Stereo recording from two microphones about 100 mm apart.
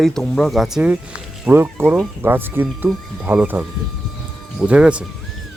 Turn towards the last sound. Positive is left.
turn(degrees=-10)  # may be behind; listen again after turning